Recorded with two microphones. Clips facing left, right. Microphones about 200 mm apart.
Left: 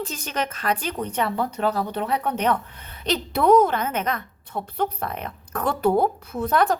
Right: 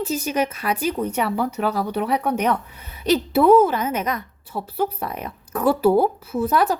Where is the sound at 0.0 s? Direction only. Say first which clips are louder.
Right 6 dB; 10° right (ahead or behind).